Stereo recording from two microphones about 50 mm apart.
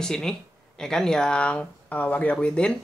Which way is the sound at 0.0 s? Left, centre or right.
Centre.